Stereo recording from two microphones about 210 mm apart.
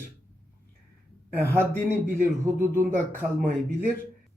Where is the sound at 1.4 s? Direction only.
10° right (ahead or behind).